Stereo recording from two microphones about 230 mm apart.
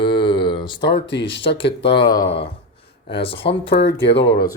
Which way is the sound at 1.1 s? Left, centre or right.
Left.